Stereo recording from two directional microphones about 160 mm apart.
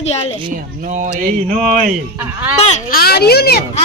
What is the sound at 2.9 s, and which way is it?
Speech, 70° left (ahead or behind).